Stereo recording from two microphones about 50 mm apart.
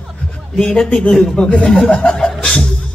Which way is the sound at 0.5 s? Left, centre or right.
Centre.